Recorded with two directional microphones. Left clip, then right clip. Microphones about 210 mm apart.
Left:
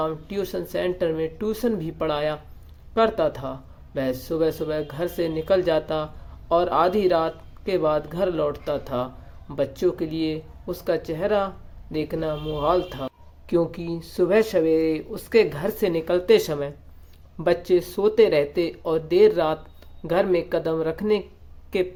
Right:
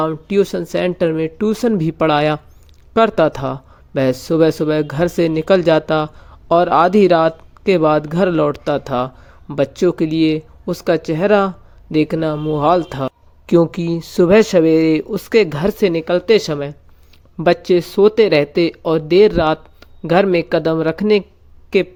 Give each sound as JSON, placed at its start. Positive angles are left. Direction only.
{"t": 0.0, "sound": "speech", "side_deg": -35}